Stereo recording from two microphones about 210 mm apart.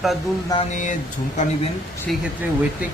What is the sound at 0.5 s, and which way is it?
Speech, 30° left (ahead or behind).